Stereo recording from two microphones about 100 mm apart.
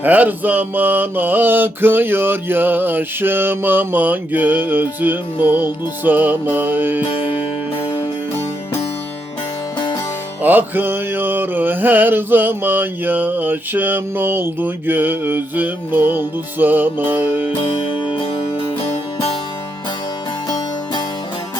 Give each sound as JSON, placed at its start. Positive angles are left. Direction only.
{"t": 0.0, "sound": "mantra", "side_deg": -15}
{"t": 9.7, "sound": "music", "side_deg": 45}
{"t": 10.4, "sound": "mantra", "side_deg": -20}
{"t": 17.6, "sound": "music", "side_deg": 65}
{"t": 18.0, "sound": "music", "side_deg": 55}